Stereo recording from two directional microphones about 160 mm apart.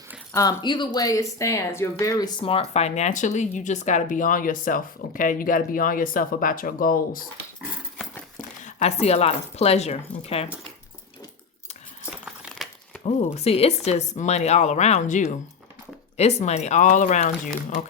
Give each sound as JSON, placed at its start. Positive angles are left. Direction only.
{"t": 0.3, "sound": "speech", "side_deg": 25}
{"t": 2.4, "sound": "speech", "side_deg": 40}
{"t": 8.4, "sound": "speech", "side_deg": 45}
{"t": 12.1, "sound": "a sound", "side_deg": -5}
{"t": 13.1, "sound": "speech", "side_deg": 40}